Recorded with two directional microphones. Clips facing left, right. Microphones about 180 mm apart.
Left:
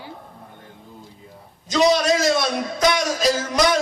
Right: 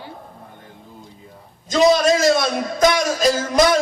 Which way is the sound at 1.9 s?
50° right (ahead or behind).